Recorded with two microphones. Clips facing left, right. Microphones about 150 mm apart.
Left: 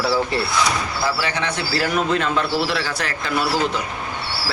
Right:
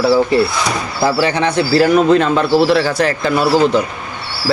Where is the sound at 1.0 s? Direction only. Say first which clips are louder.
Right 11 dB; 30° right (ahead or behind).